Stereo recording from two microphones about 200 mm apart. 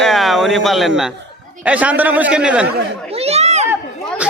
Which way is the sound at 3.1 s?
30° right (ahead or behind).